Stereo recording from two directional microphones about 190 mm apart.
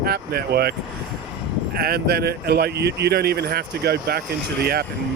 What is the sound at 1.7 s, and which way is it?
Speech, 55° right (ahead or behind).